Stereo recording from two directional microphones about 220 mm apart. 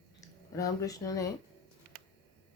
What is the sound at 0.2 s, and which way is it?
Speech, 15° left (ahead or behind).